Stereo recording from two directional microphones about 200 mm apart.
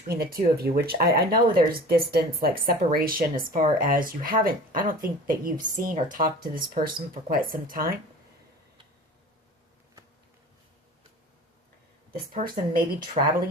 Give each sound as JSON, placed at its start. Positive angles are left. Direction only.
{"t": 0.1, "sound": "speech", "side_deg": -50}
{"t": 12.1, "sound": "speech", "side_deg": -45}
{"t": 13.2, "sound": "speech", "side_deg": -30}